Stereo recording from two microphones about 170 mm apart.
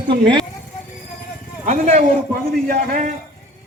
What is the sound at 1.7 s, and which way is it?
A man's voice, 40° right (ahead or behind).